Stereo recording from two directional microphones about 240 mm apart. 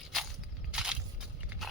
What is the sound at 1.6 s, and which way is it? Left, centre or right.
Pig, centre.